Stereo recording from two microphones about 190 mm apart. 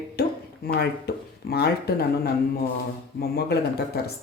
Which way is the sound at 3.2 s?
55° left (ahead or behind).